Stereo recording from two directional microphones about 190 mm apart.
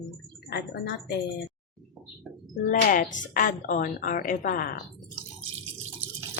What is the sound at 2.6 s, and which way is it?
A woman's voice, 45° left (ahead or behind).